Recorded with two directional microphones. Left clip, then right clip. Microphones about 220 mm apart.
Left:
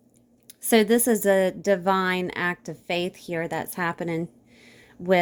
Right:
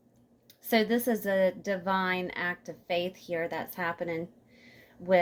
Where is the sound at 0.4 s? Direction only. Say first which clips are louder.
Left 7 dB; 55° left (ahead or behind).